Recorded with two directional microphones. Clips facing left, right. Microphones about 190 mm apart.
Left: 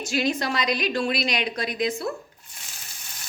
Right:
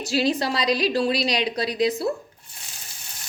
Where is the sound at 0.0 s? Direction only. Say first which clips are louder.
Right 3 dB; 35° right (ahead or behind).